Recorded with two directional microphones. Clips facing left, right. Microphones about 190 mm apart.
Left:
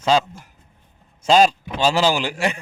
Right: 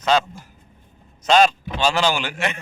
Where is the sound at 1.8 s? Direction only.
35° left (ahead or behind).